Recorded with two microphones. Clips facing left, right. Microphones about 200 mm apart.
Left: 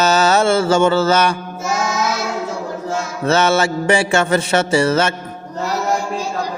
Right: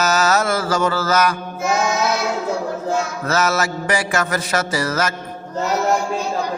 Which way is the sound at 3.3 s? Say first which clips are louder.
Left 6 dB; 30° left (ahead or behind).